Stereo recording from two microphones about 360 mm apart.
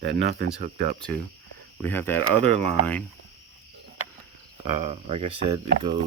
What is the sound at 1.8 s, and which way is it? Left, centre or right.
Speech, centre.